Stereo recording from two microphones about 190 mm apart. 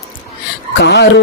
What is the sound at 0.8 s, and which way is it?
Speech, 65° left (ahead or behind).